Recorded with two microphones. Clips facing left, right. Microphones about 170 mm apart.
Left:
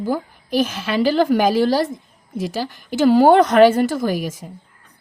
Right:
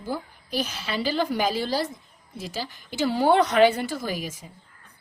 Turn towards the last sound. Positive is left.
turn(degrees=45)  # may be behind; listen again after turning